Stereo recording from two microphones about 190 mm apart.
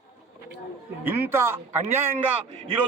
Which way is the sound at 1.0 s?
10° right (ahead or behind).